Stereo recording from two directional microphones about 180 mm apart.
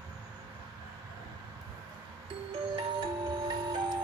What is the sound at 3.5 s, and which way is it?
Music, 25° right (ahead or behind).